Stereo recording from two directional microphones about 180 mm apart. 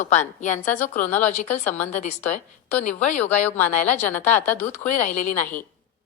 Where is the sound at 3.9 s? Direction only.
10° left (ahead or behind).